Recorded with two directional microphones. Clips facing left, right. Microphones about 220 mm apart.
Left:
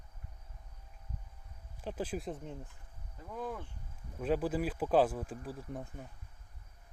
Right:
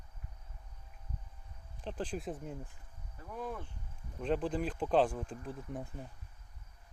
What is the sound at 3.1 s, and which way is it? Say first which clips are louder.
Speech: left 1 dB; 15° left (ahead or behind).